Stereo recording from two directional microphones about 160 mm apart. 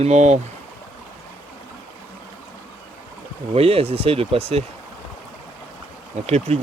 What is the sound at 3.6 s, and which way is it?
Speech, 40° right (ahead or behind).